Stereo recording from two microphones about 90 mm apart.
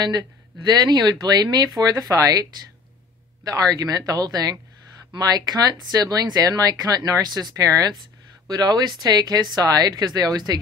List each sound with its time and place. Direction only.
0.0 s speech: 50° right (ahead or behind)
3.4 s speech: 45° right (ahead or behind)